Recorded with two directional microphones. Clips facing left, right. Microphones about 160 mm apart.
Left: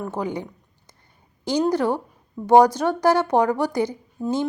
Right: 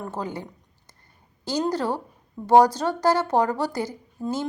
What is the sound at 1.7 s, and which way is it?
A woman's voice, 15° left (ahead or behind).